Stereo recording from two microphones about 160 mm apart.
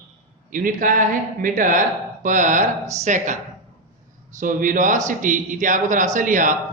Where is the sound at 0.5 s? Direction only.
55° right (ahead or behind).